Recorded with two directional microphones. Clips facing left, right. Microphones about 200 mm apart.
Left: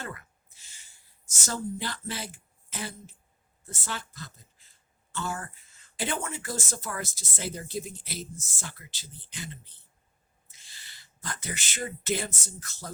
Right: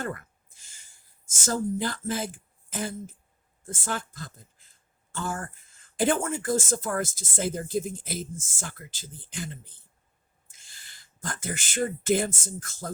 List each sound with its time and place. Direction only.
0.0 s speech: 50° right (ahead or behind)
1.5 s speech: 45° right (ahead or behind)